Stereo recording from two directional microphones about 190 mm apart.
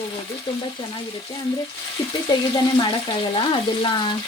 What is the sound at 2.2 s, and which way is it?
Speech, 20° left (ahead or behind).